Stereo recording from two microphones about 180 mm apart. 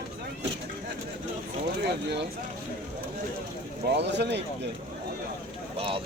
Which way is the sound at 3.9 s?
70° right (ahead or behind).